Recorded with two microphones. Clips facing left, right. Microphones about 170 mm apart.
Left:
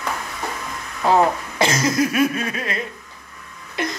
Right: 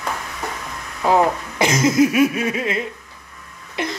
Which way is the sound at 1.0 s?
15° right (ahead or behind).